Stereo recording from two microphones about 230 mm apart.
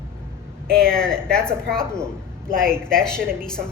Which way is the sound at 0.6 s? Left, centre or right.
Centre.